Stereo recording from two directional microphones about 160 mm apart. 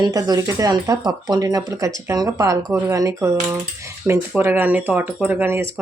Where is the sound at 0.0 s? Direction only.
20° right (ahead or behind).